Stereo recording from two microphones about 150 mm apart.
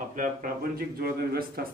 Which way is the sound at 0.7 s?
90° right.